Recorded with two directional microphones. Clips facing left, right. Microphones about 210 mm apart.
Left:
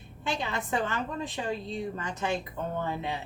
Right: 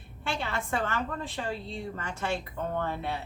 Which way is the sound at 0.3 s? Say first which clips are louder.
Left 1 dB; 20° left (ahead or behind).